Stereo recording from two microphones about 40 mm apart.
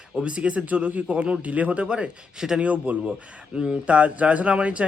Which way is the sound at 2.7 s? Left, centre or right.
Right.